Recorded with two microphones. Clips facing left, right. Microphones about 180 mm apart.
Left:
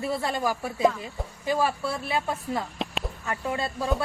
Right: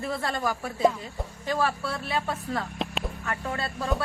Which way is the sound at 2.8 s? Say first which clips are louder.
Even; centre (ahead or behind).